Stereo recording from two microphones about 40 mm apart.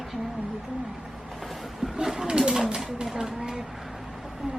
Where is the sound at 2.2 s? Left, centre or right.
Centre.